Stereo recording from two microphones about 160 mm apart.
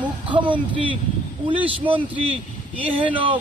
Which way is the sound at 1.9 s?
35° right (ahead or behind).